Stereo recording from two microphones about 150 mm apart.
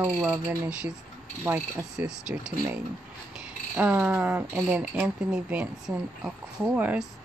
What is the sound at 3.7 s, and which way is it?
Speech, 10° right (ahead or behind).